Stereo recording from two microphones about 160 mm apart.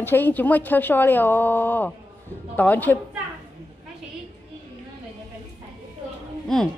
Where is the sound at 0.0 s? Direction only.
10° left (ahead or behind).